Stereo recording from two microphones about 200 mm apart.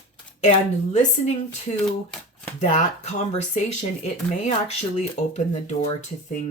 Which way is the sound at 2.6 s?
35° left (ahead or behind).